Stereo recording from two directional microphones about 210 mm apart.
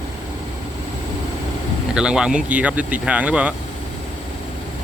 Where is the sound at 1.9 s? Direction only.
5° right (ahead or behind).